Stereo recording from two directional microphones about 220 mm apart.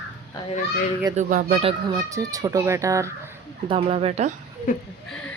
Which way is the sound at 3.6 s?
25° right (ahead or behind).